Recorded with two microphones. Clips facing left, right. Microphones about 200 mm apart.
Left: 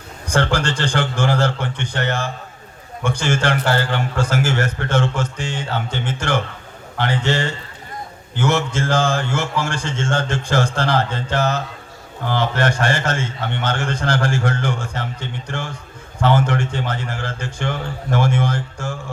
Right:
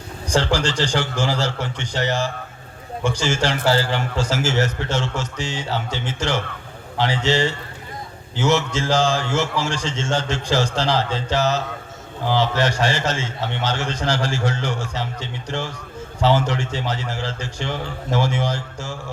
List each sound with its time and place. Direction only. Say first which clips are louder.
0.3 s a man's voice: left 1 dB; 55° left (ahead or behind)